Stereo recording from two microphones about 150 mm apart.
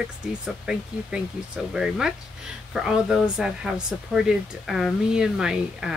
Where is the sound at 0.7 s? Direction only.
5° right (ahead or behind).